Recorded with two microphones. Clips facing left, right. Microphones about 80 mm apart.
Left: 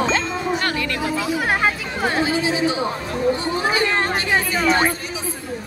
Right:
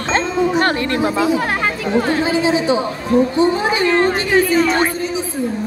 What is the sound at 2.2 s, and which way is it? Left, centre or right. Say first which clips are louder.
Speech: right 4 dB; right.